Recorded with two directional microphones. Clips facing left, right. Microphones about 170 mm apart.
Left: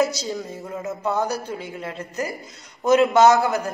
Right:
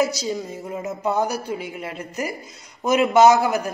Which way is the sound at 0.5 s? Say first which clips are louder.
Right 1 dB; 15° right (ahead or behind).